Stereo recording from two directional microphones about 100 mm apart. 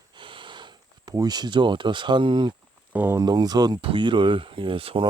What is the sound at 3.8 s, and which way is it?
Speech, 60° right (ahead or behind).